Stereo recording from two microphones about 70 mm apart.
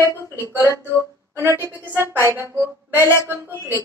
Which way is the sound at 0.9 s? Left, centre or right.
Left.